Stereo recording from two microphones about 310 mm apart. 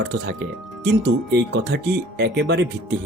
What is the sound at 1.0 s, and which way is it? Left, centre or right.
Speech, right.